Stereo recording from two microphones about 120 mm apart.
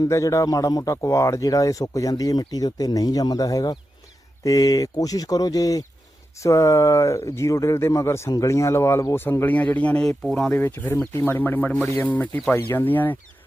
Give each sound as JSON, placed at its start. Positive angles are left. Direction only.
{"t": 0.0, "sound": "speech", "side_deg": 25}
{"t": 11.2, "sound": "speech", "side_deg": 20}